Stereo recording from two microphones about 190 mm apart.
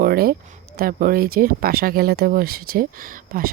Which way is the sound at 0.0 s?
50° right (ahead or behind).